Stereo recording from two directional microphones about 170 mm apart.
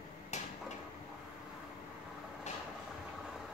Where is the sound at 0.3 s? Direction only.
45° left (ahead or behind).